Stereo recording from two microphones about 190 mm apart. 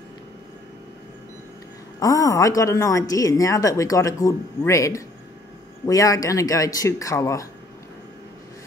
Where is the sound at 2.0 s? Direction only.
15° left (ahead or behind).